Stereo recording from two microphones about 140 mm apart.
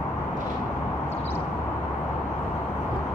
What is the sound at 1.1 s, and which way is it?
Vehicle, 15° left (ahead or behind).